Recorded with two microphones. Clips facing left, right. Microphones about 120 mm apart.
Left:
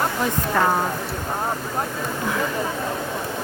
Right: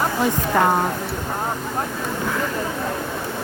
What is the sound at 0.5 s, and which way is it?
Speech, 15° right (ahead or behind).